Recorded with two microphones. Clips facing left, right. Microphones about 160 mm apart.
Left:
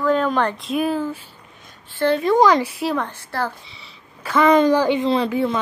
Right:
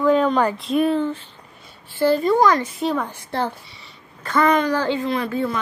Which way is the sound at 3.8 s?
5° left (ahead or behind).